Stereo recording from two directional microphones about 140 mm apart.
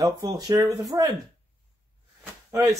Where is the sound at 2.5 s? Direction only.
20° right (ahead or behind).